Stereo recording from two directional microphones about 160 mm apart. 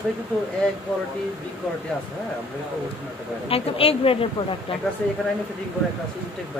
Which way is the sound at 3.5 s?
35° left (ahead or behind).